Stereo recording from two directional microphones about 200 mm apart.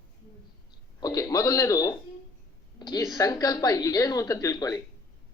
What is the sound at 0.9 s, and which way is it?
A woman's voice, 15° left (ahead or behind).